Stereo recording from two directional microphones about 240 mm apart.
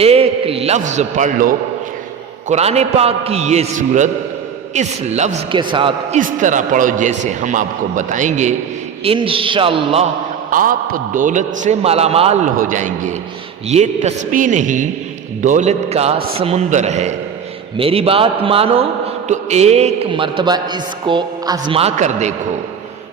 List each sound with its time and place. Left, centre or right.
0.0 s a man's voice: right
6.1 s a man's voice: right
10.5 s a man's voice: right